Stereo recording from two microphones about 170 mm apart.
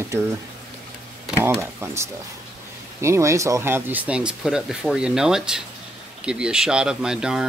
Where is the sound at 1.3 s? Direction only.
15° right (ahead or behind).